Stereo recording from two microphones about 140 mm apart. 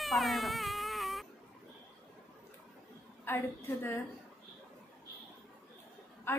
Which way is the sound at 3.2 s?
15° left (ahead or behind).